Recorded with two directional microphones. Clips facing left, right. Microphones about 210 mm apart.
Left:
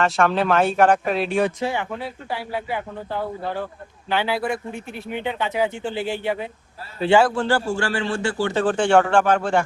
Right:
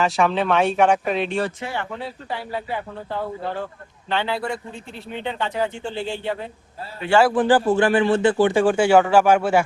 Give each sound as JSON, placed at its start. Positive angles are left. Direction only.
{"t": 0.0, "sound": "speech", "side_deg": 0}
{"t": 7.3, "sound": "speech", "side_deg": -15}